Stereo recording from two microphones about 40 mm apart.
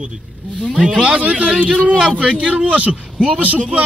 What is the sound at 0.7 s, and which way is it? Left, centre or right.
Speech, right.